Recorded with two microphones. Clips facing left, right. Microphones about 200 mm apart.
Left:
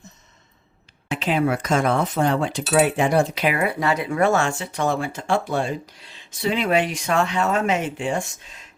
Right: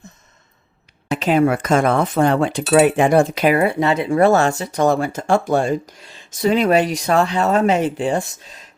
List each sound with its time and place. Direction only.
1.0 s speech: 40° right (ahead or behind)
3.7 s speech: 25° right (ahead or behind)